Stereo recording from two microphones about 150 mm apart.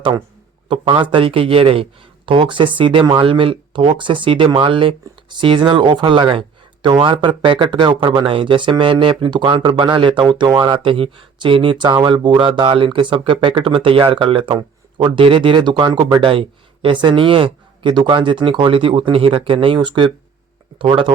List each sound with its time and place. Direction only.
0.7 s speech: 35° right (ahead or behind)